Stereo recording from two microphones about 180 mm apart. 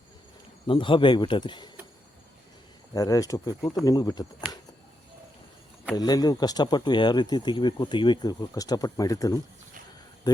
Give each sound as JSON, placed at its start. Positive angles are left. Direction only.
{"t": 0.7, "sound": "speech", "side_deg": 25}
{"t": 2.9, "sound": "speech", "side_deg": 20}
{"t": 6.0, "sound": "speech", "side_deg": 20}